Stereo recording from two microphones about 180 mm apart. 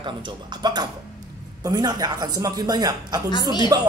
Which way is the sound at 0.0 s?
25° right (ahead or behind).